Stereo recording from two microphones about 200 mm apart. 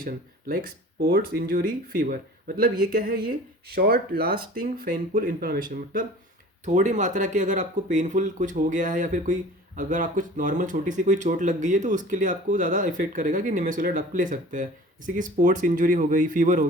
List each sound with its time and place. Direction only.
0.0 s speech: 45° right (ahead or behind)